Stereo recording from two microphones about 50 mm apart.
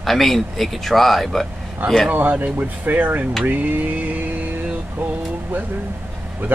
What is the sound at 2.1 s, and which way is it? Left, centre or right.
Speech, right.